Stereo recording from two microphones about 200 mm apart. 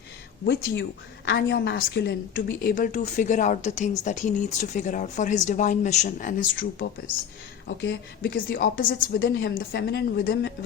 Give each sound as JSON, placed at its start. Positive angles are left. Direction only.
{"t": 0.4, "sound": "a woman's voice", "side_deg": 60}
{"t": 7.8, "sound": "a woman's voice", "side_deg": 55}